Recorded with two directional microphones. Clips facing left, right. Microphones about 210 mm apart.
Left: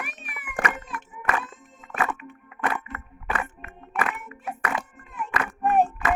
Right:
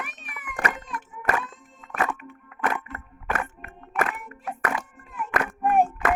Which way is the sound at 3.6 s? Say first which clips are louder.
Right 1 dB; 45° right (ahead or behind).